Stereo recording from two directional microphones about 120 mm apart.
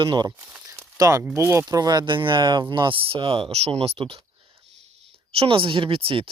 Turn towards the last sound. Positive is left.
turn(degrees=-50)  # may be behind; listen again after turning